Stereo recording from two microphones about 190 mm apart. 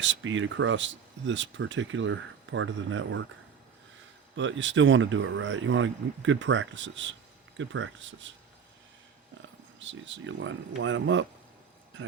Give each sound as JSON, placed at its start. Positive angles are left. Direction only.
{"t": 0.0, "sound": "speech", "side_deg": -80}
{"t": 4.4, "sound": "speech", "side_deg": -75}
{"t": 9.8, "sound": "speech", "side_deg": -75}